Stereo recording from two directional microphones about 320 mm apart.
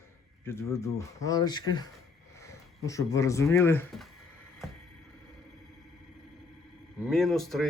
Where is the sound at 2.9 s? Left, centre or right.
Centre.